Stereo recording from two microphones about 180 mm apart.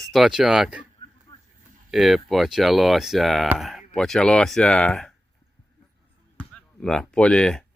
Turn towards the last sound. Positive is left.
turn(degrees=5)  # may be behind; listen again after turning